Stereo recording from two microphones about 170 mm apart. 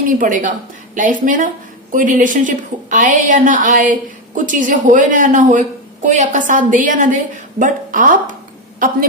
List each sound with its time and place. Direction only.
0.2 s speech: 50° right (ahead or behind)